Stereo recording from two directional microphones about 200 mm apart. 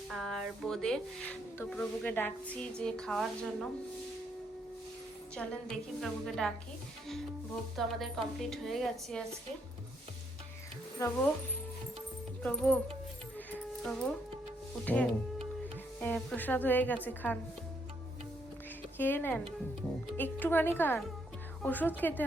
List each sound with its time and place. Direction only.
0.1 s speech: centre (ahead or behind)
5.3 s speech: 5° left (ahead or behind)
7.8 s speech: centre (ahead or behind)
11.0 s speech: 15° left (ahead or behind)
12.4 s speech: 5° left (ahead or behind)
13.5 s music: 5° left (ahead or behind)
16.0 s speech: 5° left (ahead or behind)
18.9 s speech: 10° left (ahead or behind)